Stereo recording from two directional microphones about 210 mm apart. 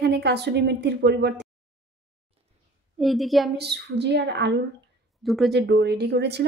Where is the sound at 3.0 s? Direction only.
Centre (ahead or behind).